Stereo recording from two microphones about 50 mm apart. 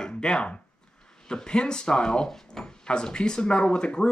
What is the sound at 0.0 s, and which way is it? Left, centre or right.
Speech, centre.